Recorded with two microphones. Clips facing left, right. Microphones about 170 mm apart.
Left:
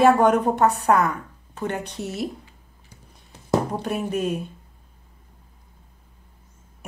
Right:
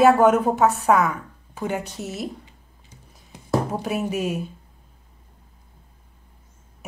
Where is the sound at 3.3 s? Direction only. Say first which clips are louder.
Left 1 dB; 10° right (ahead or behind).